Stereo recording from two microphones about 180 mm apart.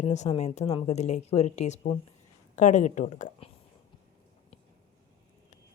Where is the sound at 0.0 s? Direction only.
35° left (ahead or behind).